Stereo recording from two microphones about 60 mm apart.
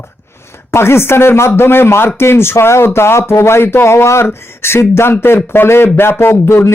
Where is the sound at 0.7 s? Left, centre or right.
Left.